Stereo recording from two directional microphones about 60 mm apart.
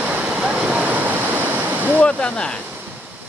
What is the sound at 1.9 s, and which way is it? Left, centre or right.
Speech, centre.